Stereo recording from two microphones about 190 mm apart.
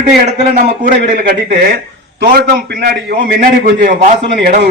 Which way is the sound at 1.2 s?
55° right (ahead or behind).